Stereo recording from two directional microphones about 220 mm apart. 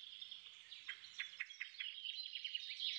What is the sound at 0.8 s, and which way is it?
Bird vocalization, 55° right (ahead or behind).